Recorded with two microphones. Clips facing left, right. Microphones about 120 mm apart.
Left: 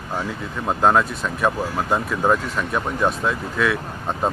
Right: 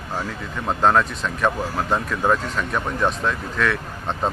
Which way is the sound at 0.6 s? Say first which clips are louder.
Left 1 dB; 5° left (ahead or behind).